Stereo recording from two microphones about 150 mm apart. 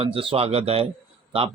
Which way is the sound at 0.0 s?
35° right (ahead or behind).